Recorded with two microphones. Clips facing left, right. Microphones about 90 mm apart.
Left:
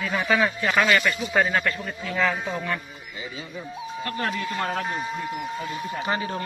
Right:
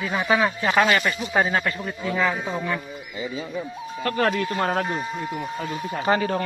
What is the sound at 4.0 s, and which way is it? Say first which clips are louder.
Speech: right 6 dB; 85° right.